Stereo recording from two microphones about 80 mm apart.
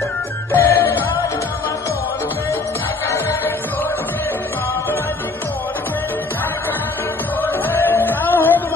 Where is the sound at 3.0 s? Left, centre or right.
Left.